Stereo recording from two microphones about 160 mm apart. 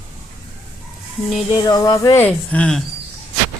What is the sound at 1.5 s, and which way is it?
Music, 25° left (ahead or behind).